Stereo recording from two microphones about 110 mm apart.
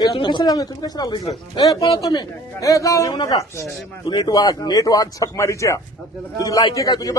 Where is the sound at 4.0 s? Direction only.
40° left (ahead or behind).